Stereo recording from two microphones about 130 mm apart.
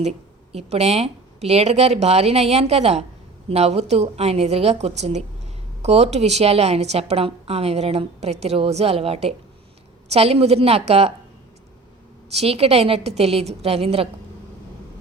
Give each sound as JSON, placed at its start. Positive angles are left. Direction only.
{"t": 0.5, "sound": "a woman's voice", "side_deg": -55}
{"t": 12.4, "sound": "a woman's voice", "side_deg": -50}